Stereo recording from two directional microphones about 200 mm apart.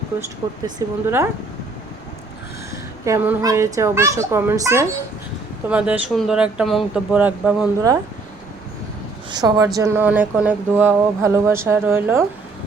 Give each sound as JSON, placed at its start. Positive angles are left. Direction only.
{"t": 0.8, "sound": "speech", "side_deg": -15}
{"t": 3.0, "sound": "speech", "side_deg": -10}
{"t": 9.3, "sound": "speech", "side_deg": -20}